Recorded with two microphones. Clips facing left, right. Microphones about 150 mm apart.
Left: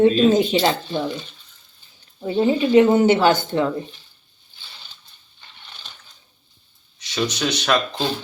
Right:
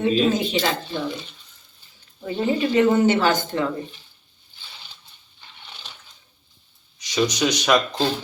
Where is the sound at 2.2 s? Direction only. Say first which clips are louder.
Left 4 dB; 25° left (ahead or behind).